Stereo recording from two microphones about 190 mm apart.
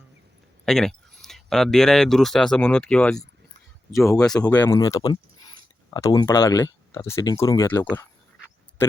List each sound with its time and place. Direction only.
0.6 s speech: 5° left (ahead or behind)
3.9 s speech: 15° left (ahead or behind)